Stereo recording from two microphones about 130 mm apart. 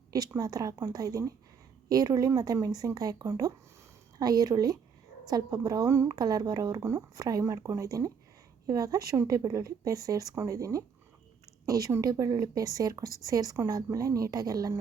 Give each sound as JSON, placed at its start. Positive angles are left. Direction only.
{"t": 0.1, "sound": "a woman's voice", "side_deg": -30}